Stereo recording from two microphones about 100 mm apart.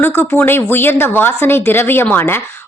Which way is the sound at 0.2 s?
20° left (ahead or behind).